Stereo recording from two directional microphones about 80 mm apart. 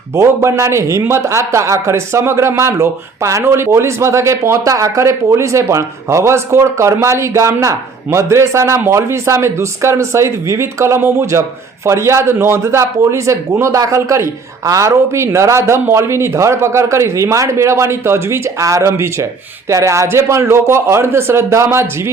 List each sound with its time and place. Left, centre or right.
0.2 s a man's voice: right